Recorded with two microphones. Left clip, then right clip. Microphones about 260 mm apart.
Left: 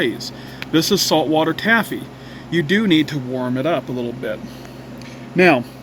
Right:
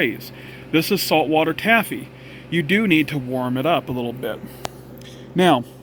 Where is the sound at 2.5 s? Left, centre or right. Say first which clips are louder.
Left 2 dB; left.